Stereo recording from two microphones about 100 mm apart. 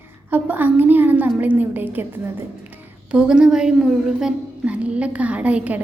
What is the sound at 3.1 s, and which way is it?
A child's voice, 10° right (ahead or behind).